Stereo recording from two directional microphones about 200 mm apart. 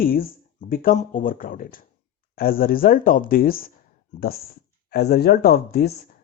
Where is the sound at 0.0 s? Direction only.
45° left (ahead or behind).